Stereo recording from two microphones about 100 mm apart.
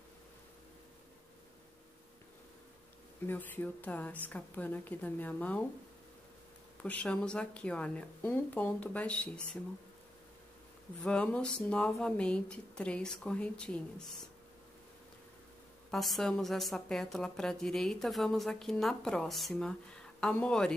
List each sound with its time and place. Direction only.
3.3 s speech: 20° left (ahead or behind)
6.8 s speech: 15° left (ahead or behind)
11.0 s speech: 10° left (ahead or behind)
15.9 s a woman's voice: centre (ahead or behind)